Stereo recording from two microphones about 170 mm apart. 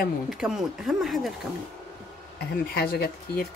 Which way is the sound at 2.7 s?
65° left (ahead or behind).